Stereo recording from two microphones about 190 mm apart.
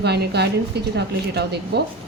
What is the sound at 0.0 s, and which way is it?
A woman's voice, 60° right (ahead or behind).